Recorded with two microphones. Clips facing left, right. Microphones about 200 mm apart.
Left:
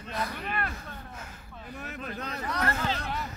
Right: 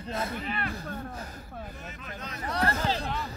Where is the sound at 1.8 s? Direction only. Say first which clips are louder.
Left 4 dB; 60° left (ahead or behind).